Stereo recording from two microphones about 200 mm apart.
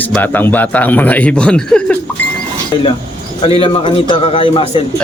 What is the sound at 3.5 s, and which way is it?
A man's voice, 25° left (ahead or behind).